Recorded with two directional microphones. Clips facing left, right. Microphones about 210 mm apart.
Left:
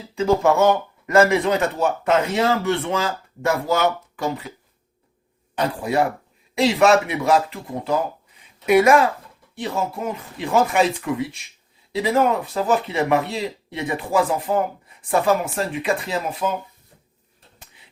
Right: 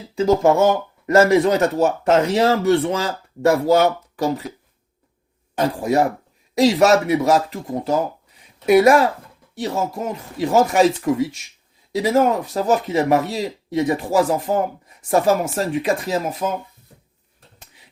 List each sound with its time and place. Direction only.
0.2 s speech: 35° right (ahead or behind)
5.5 s speech: 45° right (ahead or behind)